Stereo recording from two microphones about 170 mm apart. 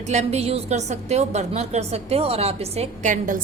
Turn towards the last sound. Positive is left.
turn(degrees=-50)  # may be behind; listen again after turning